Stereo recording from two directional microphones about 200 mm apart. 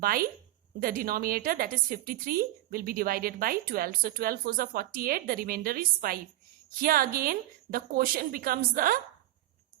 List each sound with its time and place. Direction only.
0.0 s a woman's voice: 45° right (ahead or behind)